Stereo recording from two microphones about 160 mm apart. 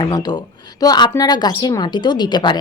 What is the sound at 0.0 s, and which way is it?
A woman's voice, 25° left (ahead or behind).